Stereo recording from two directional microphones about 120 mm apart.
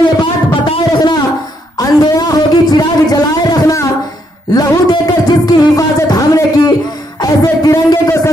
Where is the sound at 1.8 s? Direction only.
30° left (ahead or behind).